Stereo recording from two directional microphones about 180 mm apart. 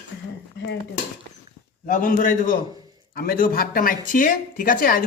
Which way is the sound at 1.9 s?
50° left (ahead or behind).